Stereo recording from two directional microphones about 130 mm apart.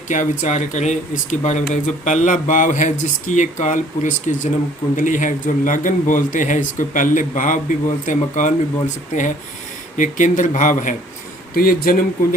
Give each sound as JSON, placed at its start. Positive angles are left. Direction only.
{"t": 0.1, "sound": "speech", "side_deg": 70}
{"t": 11.6, "sound": "speech", "side_deg": 90}